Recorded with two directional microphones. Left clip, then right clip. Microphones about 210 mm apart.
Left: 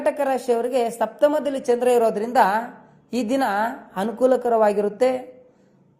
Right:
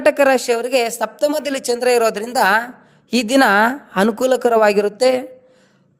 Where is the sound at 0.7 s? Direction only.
60° right (ahead or behind).